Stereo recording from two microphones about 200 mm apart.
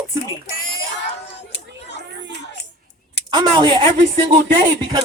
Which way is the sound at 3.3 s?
20° right (ahead or behind).